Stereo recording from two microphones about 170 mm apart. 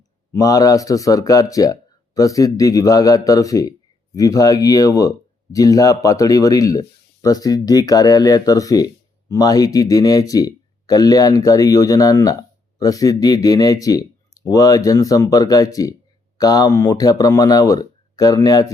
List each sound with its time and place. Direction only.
0.3 s speech: 20° left (ahead or behind)